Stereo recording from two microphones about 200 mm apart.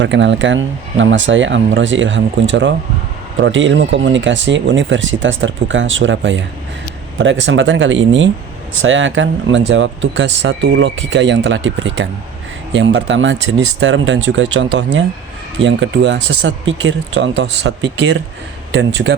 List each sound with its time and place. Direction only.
0.0 s speech: 65° right (ahead or behind)